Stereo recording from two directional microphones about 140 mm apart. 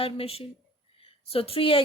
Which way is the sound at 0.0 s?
45° left (ahead or behind).